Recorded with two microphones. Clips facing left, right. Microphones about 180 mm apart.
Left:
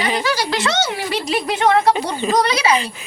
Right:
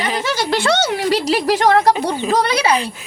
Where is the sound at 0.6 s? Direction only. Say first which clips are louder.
Right 4 dB; 60° right (ahead or behind).